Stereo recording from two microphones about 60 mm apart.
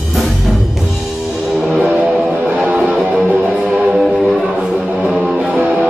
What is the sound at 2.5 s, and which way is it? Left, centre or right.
Music, centre.